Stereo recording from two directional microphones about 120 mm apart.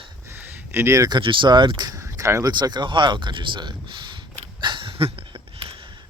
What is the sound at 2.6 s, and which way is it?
Speech, 40° right (ahead or behind).